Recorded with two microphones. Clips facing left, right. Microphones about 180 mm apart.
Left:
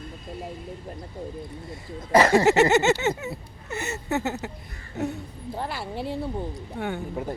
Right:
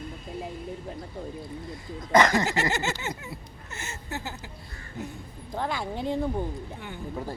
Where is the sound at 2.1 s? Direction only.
30° left (ahead or behind).